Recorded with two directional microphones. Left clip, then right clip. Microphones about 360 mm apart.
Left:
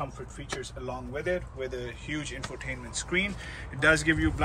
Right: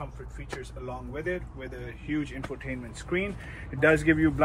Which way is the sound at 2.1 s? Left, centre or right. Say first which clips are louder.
Right 5 dB; centre.